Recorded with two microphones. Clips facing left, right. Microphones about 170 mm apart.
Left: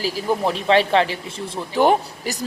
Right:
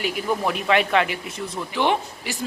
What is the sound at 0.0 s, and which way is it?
Speech, 30° left (ahead or behind).